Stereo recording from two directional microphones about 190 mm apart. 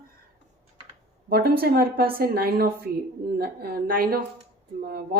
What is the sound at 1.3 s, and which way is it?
Speech, 55° right (ahead or behind).